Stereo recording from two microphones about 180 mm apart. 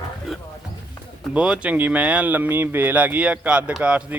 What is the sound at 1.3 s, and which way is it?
Speech, 5° right (ahead or behind).